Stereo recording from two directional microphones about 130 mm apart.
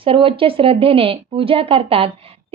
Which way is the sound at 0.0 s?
45° right (ahead or behind).